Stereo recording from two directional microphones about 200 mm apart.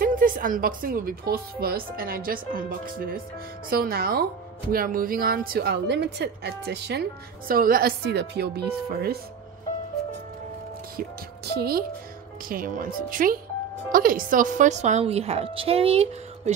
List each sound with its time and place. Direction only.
0.0 s a woman's voice: 45° right (ahead or behind)
11.5 s a woman's voice: 50° right (ahead or behind); by 16.5 s 30° right (ahead or behind)